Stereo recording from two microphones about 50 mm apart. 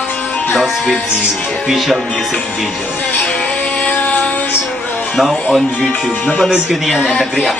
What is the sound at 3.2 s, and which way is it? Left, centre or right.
Music, centre.